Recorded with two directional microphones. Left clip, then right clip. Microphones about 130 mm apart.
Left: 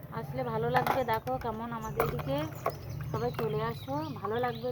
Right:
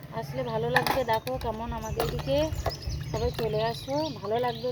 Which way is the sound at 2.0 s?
15° right (ahead or behind).